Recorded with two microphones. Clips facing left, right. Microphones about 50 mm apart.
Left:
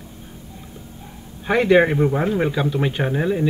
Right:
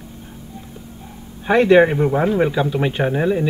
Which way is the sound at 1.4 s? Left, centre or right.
Centre.